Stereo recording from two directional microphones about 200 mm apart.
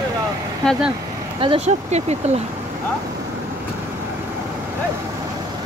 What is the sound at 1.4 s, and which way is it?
Speech, 30° right (ahead or behind).